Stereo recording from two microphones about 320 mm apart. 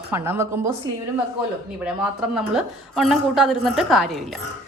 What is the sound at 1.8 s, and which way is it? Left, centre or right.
A woman's voice, centre.